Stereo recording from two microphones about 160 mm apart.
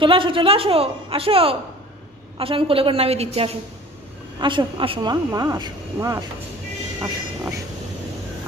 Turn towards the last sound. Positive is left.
turn(degrees=-20)  # may be behind; listen again after turning